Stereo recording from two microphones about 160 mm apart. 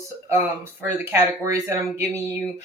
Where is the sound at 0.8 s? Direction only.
15° right (ahead or behind).